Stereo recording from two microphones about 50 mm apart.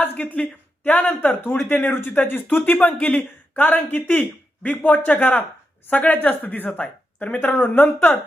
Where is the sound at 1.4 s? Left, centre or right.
Left.